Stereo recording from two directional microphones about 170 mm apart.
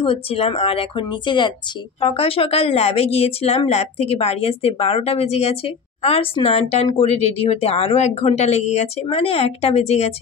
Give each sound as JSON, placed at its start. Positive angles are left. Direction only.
{"t": 0.0, "sound": "speech", "side_deg": 35}